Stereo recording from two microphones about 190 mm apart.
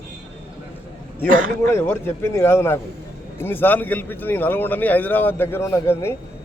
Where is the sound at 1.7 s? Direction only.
10° left (ahead or behind).